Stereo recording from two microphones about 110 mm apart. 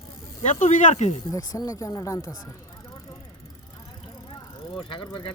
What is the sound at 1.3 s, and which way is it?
Speech, 30° left (ahead or behind).